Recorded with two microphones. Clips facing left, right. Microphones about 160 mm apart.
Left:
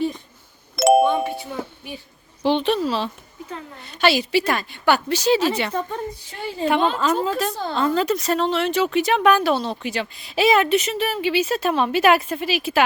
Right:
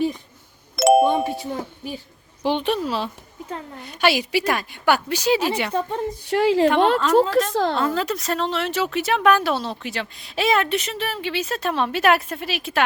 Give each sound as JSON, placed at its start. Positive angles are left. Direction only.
{"t": 0.8, "sound": "ding-dong", "side_deg": 0}
{"t": 1.0, "sound": "music", "side_deg": -40}
{"t": 2.4, "sound": "a woman's voice", "side_deg": -10}
{"t": 6.2, "sound": "a woman's voice", "side_deg": -90}
{"t": 6.7, "sound": "a woman's voice", "side_deg": -75}
{"t": 7.8, "sound": "speech", "side_deg": 0}